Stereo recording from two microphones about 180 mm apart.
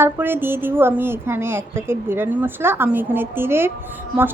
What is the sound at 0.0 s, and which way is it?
A woman's voice, 10° right (ahead or behind).